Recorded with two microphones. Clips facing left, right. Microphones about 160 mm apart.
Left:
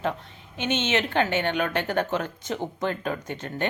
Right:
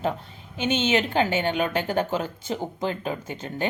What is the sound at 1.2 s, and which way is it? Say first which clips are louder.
Speech: right 1 dB; 10° right (ahead or behind).